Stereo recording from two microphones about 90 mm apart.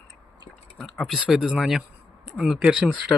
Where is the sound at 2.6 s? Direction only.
15° right (ahead or behind).